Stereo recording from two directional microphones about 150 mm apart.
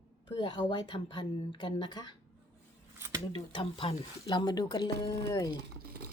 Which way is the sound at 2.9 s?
15° right (ahead or behind).